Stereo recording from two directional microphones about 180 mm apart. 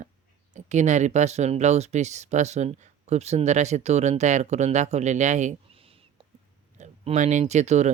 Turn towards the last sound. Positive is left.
turn(degrees=-40)  # may be behind; listen again after turning